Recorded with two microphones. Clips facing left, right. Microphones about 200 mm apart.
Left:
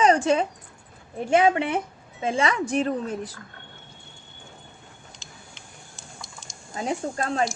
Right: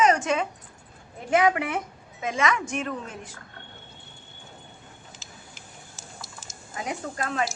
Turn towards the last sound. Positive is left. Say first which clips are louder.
# left 4 dB
turn(degrees=30)  # may be behind; listen again after turning